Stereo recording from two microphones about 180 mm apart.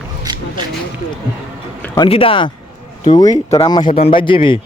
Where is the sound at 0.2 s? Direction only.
25° right (ahead or behind).